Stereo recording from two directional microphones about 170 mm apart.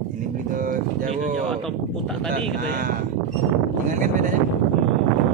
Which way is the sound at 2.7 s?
55° right (ahead or behind).